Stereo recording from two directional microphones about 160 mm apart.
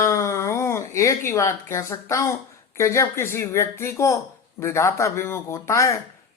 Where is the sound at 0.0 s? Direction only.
15° left (ahead or behind).